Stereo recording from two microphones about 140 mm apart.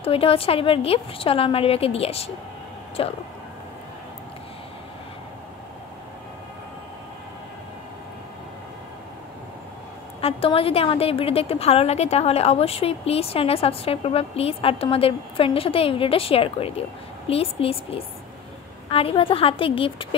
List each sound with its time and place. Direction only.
0.0 s a woman's voice: 40° left (ahead or behind)
10.2 s a woman's voice: 40° left (ahead or behind)